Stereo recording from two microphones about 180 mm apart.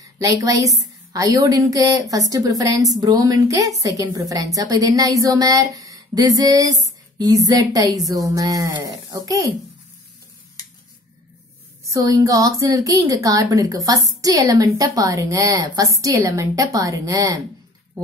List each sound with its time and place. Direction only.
0.0 s a woman's voice: 20° right (ahead or behind)
11.8 s a woman's voice: 20° right (ahead or behind)